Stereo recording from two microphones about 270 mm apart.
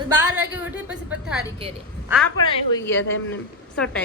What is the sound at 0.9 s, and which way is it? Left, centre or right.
Speech, centre.